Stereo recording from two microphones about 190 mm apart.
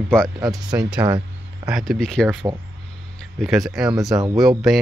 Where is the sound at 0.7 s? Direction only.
5° right (ahead or behind).